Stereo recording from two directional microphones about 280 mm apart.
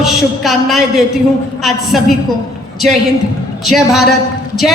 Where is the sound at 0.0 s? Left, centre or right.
Centre.